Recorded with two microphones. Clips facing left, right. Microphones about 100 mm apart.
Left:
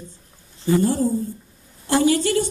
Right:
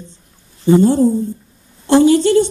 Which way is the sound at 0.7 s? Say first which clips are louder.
Right 8 dB; 25° right (ahead or behind).